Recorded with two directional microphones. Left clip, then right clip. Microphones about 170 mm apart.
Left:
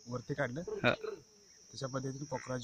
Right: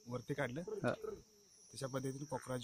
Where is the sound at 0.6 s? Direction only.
25° left (ahead or behind).